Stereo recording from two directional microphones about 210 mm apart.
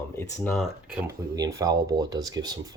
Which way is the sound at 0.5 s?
5° right (ahead or behind).